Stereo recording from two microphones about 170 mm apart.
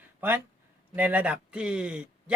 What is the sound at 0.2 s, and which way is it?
Speech, 15° right (ahead or behind).